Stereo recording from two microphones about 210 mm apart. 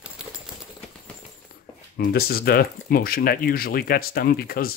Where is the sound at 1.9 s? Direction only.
45° left (ahead or behind).